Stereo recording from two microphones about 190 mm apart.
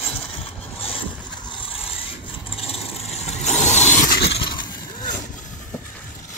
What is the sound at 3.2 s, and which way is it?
Vehicle, 35° left (ahead or behind).